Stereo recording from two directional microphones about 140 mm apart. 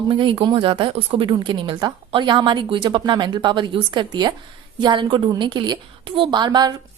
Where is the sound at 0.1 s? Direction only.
35° right (ahead or behind).